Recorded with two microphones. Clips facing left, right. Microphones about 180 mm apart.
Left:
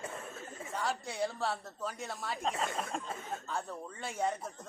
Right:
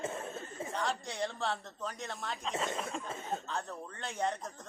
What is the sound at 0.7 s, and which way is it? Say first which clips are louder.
A man's voice: left 1 dB; 5° left (ahead or behind).